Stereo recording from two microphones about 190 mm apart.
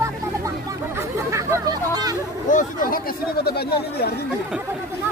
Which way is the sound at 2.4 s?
45° left (ahead or behind).